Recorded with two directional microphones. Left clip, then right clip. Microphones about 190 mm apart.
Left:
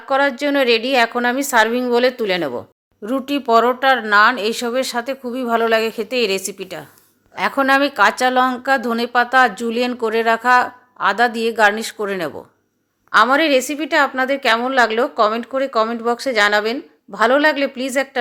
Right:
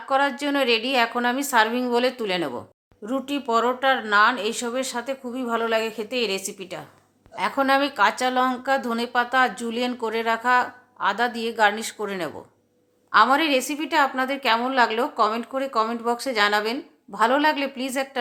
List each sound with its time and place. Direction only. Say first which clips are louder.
0.1 s a woman's voice: left 5 dB; 20° left (ahead or behind)